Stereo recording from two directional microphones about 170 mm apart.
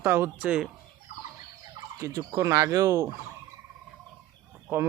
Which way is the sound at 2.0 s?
20° right (ahead or behind).